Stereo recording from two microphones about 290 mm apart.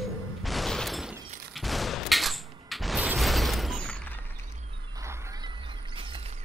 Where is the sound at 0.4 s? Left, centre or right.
Centre.